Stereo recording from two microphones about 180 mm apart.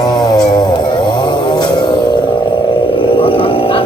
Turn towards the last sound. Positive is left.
turn(degrees=30)  # may be behind; listen again after turning